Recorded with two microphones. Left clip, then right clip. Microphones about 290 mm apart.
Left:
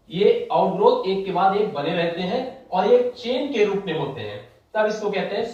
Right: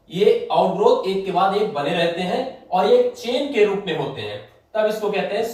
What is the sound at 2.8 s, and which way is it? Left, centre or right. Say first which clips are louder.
Speech: right 1 dB; centre.